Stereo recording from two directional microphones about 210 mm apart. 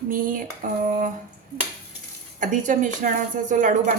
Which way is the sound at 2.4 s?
35° right (ahead or behind).